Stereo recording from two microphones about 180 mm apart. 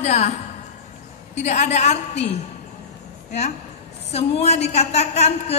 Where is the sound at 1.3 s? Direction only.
40° left (ahead or behind).